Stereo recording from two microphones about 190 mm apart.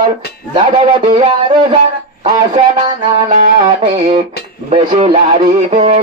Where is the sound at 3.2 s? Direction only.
40° right (ahead or behind).